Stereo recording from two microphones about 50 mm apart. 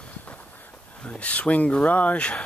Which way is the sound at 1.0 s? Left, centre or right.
Left.